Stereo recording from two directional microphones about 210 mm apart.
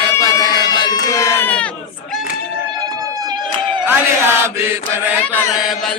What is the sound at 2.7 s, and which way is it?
Run, 15° right (ahead or behind).